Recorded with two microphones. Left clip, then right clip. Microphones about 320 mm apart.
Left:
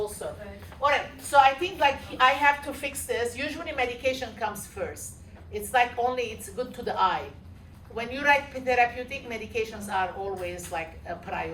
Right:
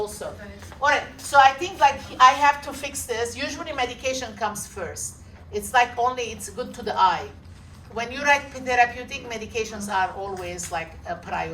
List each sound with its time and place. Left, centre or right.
1.3 s a woman's voice: centre